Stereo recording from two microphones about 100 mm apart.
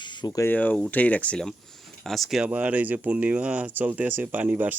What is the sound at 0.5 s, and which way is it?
A man's voice, 15° left (ahead or behind).